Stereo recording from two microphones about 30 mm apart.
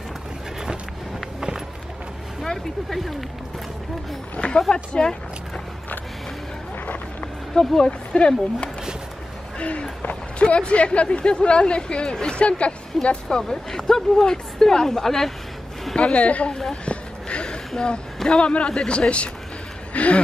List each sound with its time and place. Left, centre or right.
2.9 s speech: centre
4.4 s speech: left
7.5 s speech: left
8.1 s speech: left
13.3 s speech: centre
16.0 s speech: left
16.8 s a sound: left
18.4 s speech: left
19.9 s a sound: left